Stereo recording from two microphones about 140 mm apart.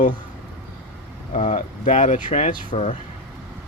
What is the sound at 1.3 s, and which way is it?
Speech, 55° left (ahead or behind).